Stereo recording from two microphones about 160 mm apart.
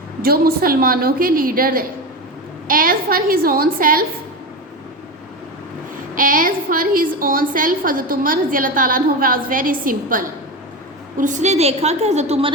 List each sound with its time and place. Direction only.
0.2 s a woman's voice: 70° right (ahead or behind)
6.1 s a woman's voice: 60° right (ahead or behind); by 12.5 s 40° right (ahead or behind)